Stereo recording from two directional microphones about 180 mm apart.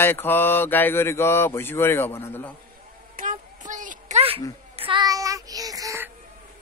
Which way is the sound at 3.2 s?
45° right (ahead or behind).